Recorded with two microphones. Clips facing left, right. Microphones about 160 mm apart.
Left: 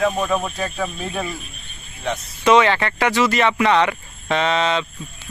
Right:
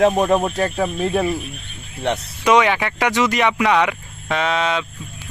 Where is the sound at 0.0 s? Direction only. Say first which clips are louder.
Right 5 dB; 60° right (ahead or behind).